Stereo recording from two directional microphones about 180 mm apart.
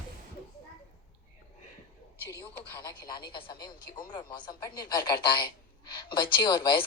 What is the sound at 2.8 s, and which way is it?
Speech, 25° left (ahead or behind).